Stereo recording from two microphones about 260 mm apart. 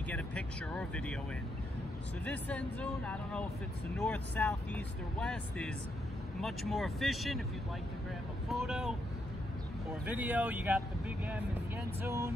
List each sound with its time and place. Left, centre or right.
0.1 s speech: centre
2.2 s speech: centre
8.5 s speech: centre
10.0 s speech: centre